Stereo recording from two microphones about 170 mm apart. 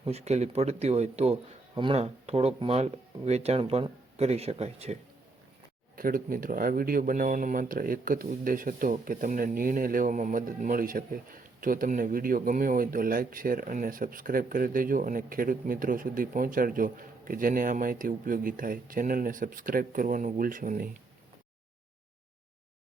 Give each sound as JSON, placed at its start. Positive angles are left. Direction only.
{"t": 0.0, "sound": "a man's voice", "side_deg": -40}
{"t": 6.0, "sound": "speech", "side_deg": -55}